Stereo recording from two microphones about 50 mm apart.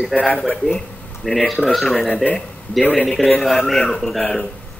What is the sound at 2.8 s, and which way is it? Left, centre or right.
Speech, left.